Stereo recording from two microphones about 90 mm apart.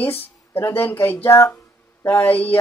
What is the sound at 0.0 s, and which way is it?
Speech, 25° left (ahead or behind).